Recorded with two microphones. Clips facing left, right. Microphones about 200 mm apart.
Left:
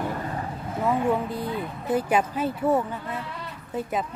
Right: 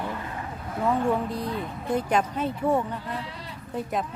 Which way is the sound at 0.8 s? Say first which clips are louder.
Even; centre (ahead or behind).